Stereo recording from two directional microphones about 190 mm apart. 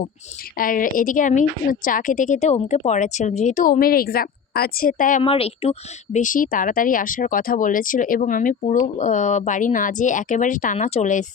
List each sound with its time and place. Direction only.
0.5 s speech: 45° left (ahead or behind)
5.2 s speech: 30° left (ahead or behind)
6.1 s speech: 45° left (ahead or behind)